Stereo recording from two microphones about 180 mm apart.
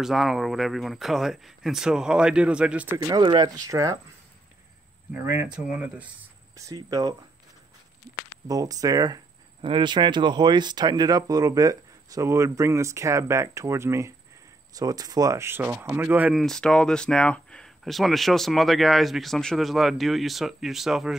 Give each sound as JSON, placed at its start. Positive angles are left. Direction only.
{"t": 0.0, "sound": "speech", "side_deg": 0}
{"t": 3.0, "sound": "speech", "side_deg": -25}
{"t": 5.1, "sound": "speech", "side_deg": -10}
{"t": 6.5, "sound": "speech", "side_deg": -20}
{"t": 8.5, "sound": "speech", "side_deg": -20}